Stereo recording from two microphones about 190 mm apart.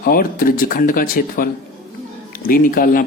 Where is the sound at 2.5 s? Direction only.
50° left (ahead or behind).